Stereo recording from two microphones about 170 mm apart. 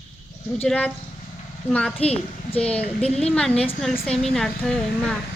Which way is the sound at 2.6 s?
5° left (ahead or behind).